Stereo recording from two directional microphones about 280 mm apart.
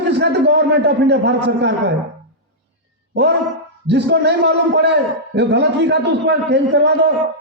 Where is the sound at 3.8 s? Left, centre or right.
Right.